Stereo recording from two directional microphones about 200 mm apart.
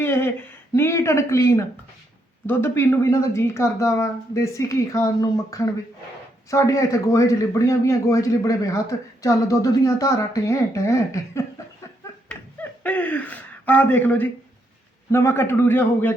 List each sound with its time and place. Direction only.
0.0 s a man's voice: 10° left (ahead or behind)
12.8 s a man's voice: 10° left (ahead or behind)